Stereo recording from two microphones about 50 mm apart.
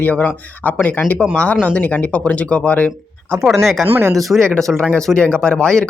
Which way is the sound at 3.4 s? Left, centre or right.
Centre.